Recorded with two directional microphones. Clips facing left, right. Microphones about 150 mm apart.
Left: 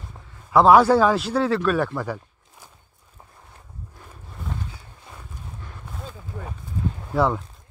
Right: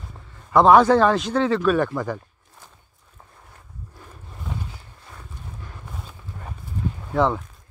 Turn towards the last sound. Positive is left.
turn(degrees=5)  # may be behind; listen again after turning